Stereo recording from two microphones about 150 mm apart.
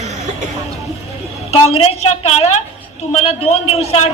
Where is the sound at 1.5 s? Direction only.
45° left (ahead or behind).